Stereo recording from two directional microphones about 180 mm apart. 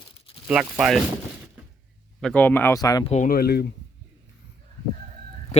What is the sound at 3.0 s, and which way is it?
Speech, 40° left (ahead or behind).